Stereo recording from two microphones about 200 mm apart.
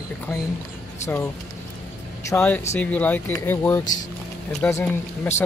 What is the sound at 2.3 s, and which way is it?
Speech, 10° left (ahead or behind).